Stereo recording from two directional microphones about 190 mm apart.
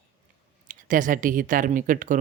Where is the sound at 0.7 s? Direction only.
45° right (ahead or behind).